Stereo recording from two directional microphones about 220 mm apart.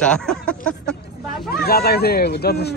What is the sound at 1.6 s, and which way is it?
Speech, 45° left (ahead or behind).